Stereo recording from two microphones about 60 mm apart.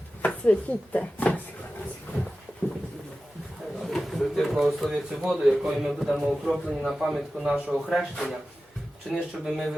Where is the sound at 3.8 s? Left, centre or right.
Centre.